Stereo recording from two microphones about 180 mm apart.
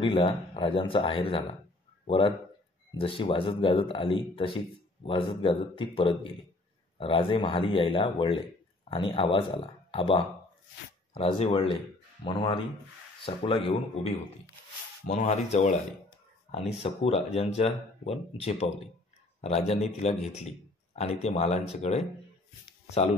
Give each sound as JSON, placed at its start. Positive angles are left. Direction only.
{"t": 0.0, "sound": "a man's voice", "side_deg": 30}
{"t": 16.8, "sound": "a man's voice", "side_deg": 35}